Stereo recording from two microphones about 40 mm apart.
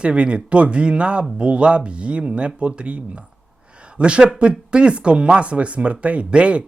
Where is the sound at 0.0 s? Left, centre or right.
Right.